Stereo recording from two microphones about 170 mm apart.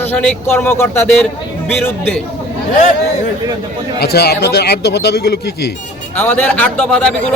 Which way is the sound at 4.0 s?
70° left (ahead or behind).